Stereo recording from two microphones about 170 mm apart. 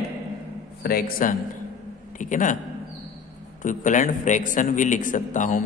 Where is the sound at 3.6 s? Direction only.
50° left (ahead or behind).